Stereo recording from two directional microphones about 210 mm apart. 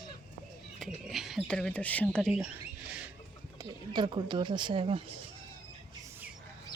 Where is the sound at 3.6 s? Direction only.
20° right (ahead or behind).